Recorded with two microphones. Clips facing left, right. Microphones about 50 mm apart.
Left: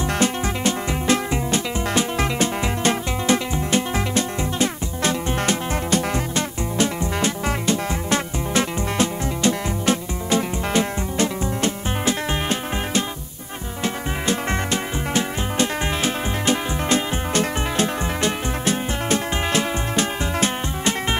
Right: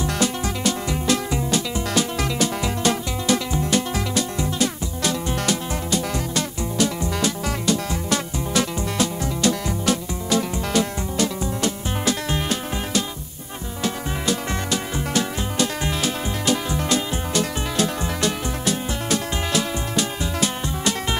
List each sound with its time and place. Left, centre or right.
0.0 s music: left
5.9 s music: left
6.3 s music: left